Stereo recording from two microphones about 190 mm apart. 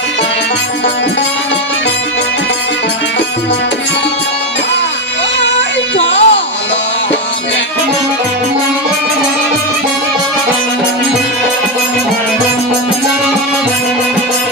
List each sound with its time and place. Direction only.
6.0 s music: 65° left (ahead or behind)